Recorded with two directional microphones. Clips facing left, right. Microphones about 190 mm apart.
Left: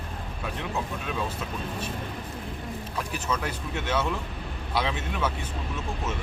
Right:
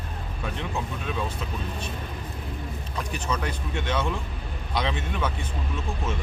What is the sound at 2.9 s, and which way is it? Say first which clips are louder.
Speech: right 1 dB; 5° left (ahead or behind).